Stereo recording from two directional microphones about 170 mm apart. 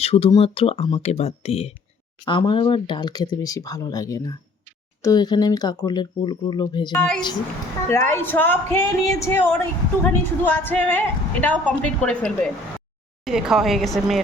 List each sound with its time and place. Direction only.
0.0 s speech: 35° left (ahead or behind)
6.9 s a woman's voice: 5° left (ahead or behind)